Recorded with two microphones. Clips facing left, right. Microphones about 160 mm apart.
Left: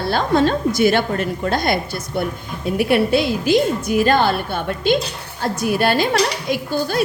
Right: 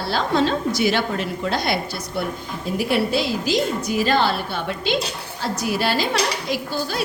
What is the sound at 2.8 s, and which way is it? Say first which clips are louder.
A woman's voice: left 5 dB; 55° left (ahead or behind).